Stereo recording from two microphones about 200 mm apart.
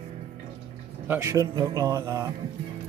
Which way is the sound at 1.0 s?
10° right (ahead or behind).